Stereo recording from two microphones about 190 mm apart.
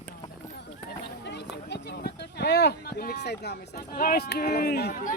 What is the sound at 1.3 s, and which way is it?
Speech, 60° left (ahead or behind).